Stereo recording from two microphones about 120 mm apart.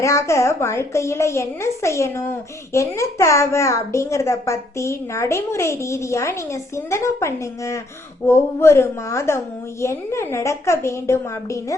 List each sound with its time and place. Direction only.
0.0 s a woman's voice: 25° left (ahead or behind)